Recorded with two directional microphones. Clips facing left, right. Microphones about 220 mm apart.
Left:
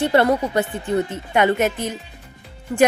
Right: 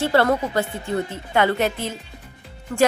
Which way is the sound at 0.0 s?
20° left (ahead or behind).